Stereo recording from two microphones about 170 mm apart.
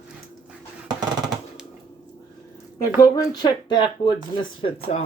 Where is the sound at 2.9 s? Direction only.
20° left (ahead or behind).